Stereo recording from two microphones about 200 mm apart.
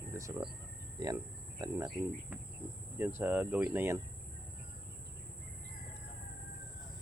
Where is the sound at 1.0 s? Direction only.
20° right (ahead or behind).